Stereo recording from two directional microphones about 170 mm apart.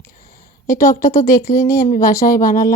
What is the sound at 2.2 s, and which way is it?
Speech, 55° left (ahead or behind).